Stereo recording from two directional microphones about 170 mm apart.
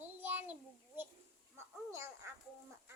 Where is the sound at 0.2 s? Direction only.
10° right (ahead or behind).